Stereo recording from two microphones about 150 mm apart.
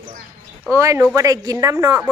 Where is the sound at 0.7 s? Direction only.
20° right (ahead or behind).